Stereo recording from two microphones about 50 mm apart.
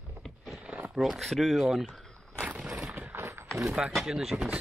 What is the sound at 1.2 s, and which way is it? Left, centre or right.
Speech, centre.